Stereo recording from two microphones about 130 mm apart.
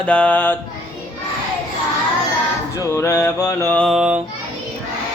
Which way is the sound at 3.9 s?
5° right (ahead or behind).